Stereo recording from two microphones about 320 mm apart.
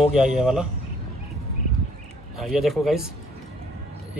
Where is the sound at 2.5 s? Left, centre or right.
Centre.